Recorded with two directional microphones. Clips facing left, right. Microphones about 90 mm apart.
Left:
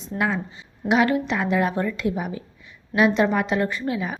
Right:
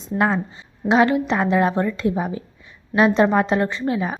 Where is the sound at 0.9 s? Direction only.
30° right (ahead or behind).